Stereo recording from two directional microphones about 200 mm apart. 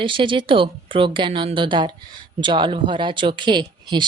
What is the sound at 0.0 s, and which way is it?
Speech, 25° right (ahead or behind).